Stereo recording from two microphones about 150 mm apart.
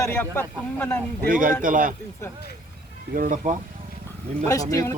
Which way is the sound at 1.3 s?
65° right (ahead or behind).